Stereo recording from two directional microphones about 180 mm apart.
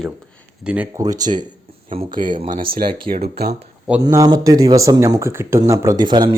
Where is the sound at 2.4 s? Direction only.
50° right (ahead or behind).